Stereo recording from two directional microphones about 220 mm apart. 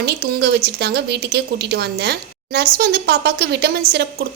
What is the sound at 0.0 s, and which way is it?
Speech, 50° right (ahead or behind).